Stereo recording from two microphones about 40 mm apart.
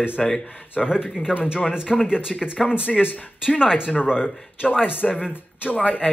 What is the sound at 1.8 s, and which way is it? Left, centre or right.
Speech, centre.